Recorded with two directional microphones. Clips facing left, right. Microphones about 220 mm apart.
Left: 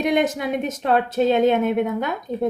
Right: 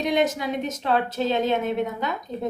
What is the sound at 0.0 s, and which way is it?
A woman's voice, 55° left (ahead or behind).